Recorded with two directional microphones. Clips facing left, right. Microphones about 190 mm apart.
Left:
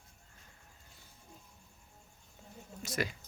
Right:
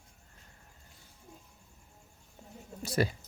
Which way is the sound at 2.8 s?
30° right (ahead or behind).